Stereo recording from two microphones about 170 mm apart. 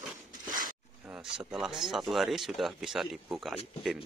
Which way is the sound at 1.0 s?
5° right (ahead or behind).